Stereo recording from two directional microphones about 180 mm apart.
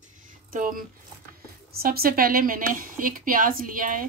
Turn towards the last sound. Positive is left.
turn(degrees=-50)  # may be behind; listen again after turning